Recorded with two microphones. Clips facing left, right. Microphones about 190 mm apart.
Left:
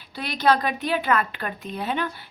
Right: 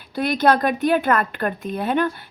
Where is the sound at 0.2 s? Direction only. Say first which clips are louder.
Right 4 dB; 50° right (ahead or behind).